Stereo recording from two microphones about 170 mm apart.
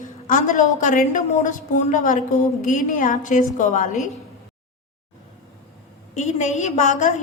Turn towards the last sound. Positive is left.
turn(degrees=45)  # may be behind; listen again after turning